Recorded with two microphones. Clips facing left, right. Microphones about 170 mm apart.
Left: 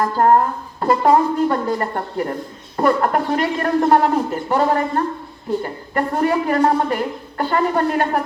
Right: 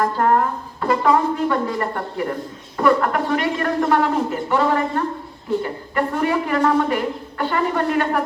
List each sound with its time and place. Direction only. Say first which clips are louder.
0.0 s a woman's voice: left 3 dB; 40° left (ahead or behind)